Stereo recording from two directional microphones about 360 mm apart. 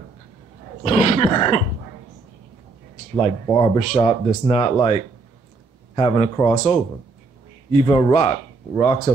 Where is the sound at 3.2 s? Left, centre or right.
Centre.